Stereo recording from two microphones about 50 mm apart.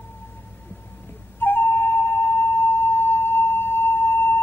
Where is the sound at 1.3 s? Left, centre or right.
Left.